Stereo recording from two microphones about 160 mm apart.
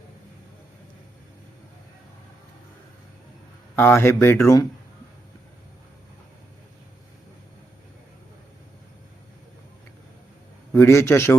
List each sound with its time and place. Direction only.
3.8 s speech: 15° left (ahead or behind)
10.7 s speech: 15° left (ahead or behind)